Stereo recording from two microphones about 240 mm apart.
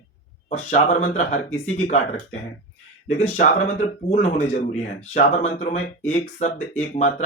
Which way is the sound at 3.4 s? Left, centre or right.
Left.